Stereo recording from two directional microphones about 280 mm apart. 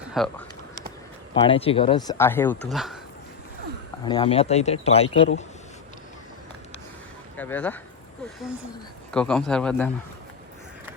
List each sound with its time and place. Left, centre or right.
0.1 s speech: centre
1.5 s speech: centre
4.0 s speech: centre
7.3 s a man's voice: centre
9.1 s a man's voice: centre